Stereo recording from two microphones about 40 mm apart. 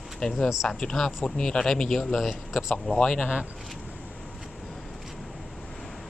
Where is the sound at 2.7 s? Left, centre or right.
Left.